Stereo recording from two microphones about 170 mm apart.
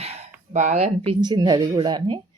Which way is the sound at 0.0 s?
40° right (ahead or behind).